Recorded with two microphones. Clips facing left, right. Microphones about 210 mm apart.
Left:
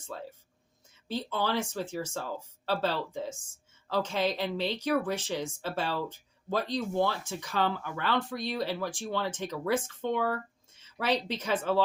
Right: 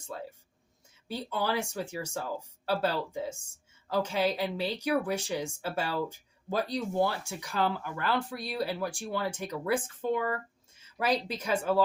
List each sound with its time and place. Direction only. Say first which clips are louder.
1.0 s speech: left 1 dB; 10° right (ahead or behind)
10.3 s a sound: even; 10° right (ahead or behind)
11.4 s speech: right 1 dB; 10° right (ahead or behind)